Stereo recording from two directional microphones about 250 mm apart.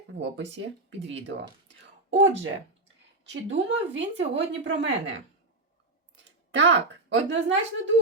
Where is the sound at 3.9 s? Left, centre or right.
Right.